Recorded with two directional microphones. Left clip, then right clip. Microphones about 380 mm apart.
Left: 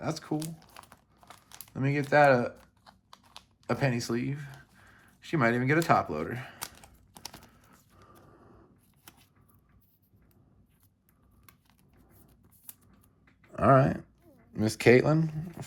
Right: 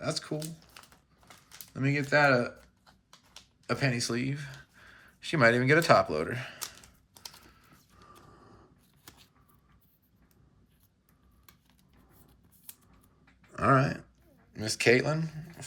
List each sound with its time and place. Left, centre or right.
0.0 s speech: centre
1.7 s speech: centre
2.8 s typing: left
3.7 s speech: centre
7.6 s a sound: centre
13.5 s a sound: centre
14.6 s speech: centre